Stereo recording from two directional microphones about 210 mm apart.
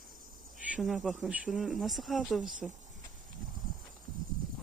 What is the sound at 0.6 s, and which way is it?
Speech, 5° right (ahead or behind).